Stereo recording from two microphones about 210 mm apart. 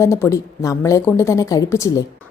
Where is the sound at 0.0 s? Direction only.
15° left (ahead or behind).